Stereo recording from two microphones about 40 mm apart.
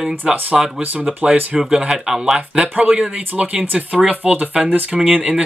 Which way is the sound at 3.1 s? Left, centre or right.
Right.